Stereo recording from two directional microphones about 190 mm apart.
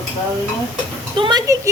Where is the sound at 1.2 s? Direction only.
20° right (ahead or behind).